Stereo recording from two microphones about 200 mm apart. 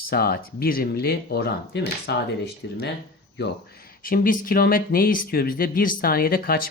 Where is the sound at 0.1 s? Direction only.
50° left (ahead or behind).